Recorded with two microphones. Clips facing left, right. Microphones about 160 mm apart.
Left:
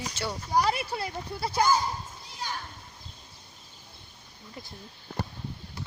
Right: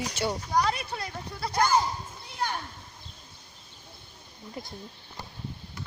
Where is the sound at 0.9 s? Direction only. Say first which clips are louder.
Left 3 dB; 25° left (ahead or behind).